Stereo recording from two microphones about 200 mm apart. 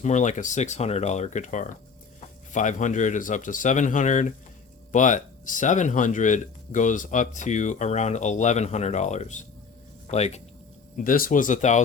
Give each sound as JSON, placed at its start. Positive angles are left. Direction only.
{"t": 0.0, "sound": "speech", "side_deg": 35}
{"t": 10.9, "sound": "speech", "side_deg": 45}